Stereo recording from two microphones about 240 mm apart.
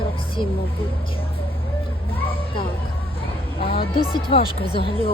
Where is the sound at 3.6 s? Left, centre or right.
Left.